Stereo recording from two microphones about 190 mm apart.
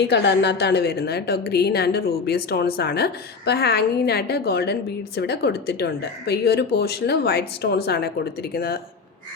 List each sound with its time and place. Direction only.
0.0 s a woman's voice: 65° left (ahead or behind)